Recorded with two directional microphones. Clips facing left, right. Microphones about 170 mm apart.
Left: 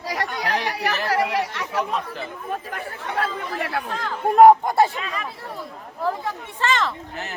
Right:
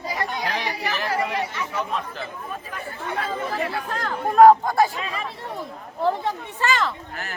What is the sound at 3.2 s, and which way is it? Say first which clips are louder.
Speech: right 1 dB; 70° left (ahead or behind).